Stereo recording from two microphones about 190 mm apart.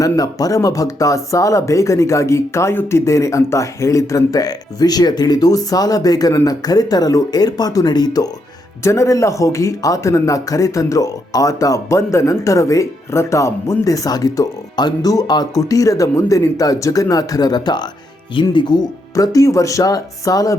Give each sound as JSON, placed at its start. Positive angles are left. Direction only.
{"t": 0.0, "sound": "speech", "side_deg": 20}